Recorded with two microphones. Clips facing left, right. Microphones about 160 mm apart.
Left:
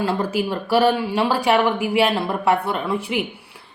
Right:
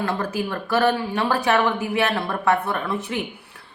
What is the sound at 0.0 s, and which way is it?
A woman's voice, 25° left (ahead or behind).